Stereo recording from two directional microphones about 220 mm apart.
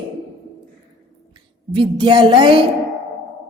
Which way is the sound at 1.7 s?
20° right (ahead or behind).